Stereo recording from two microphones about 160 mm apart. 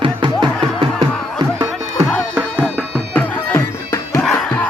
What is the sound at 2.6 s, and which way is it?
Music, 10° left (ahead or behind).